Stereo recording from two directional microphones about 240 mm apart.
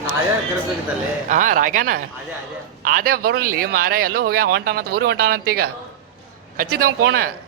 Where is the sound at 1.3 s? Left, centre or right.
Right.